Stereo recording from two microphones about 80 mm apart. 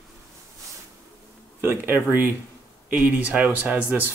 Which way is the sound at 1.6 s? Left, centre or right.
Right.